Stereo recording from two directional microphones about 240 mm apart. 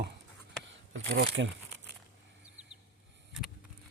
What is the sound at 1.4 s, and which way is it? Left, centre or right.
Speech, right.